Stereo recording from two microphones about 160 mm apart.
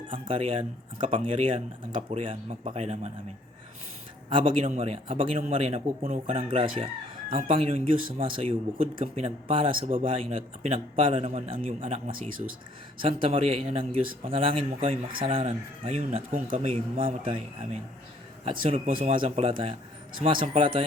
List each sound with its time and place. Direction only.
0.1 s a man's voice: 35° right (ahead or behind)
4.3 s speech: 30° right (ahead or behind)